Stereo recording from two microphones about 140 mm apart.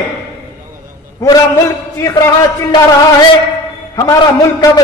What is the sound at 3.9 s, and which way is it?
Speech, 25° left (ahead or behind).